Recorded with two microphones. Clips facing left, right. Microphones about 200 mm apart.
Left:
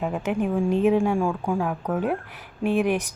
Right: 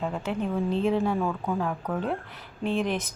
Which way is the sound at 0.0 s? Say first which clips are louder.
Left 4 dB; 15° left (ahead or behind).